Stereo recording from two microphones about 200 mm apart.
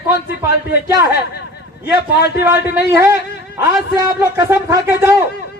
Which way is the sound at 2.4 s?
10° right (ahead or behind).